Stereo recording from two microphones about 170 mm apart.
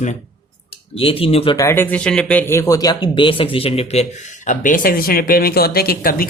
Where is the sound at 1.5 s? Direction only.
15° left (ahead or behind); by 4.5 s 40° left (ahead or behind).